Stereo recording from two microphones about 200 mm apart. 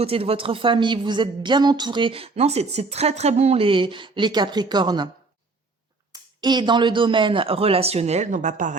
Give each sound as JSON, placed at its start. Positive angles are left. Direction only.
{"t": 0.0, "sound": "a woman's voice", "side_deg": -30}
{"t": 6.1, "sound": "a woman's voice", "side_deg": -20}